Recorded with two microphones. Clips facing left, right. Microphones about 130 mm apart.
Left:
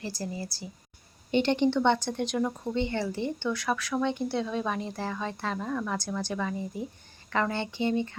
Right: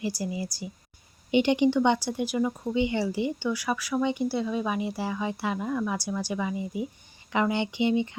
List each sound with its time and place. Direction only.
0.0 s speech: 15° right (ahead or behind)